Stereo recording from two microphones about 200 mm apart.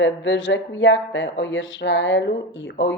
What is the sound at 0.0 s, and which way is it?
A woman's voice, 65° left (ahead or behind).